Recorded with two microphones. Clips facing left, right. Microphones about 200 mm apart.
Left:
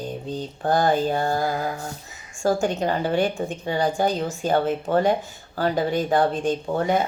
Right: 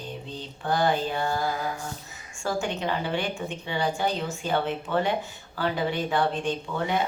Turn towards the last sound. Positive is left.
turn(degrees=45)  # may be behind; listen again after turning